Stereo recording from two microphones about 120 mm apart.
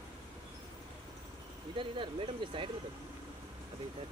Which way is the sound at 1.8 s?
45° right (ahead or behind).